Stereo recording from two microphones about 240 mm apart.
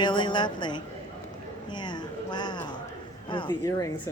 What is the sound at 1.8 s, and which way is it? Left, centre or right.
A woman's voice, centre.